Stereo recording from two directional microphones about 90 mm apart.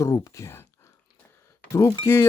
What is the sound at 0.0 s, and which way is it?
Speech, 40° left (ahead or behind).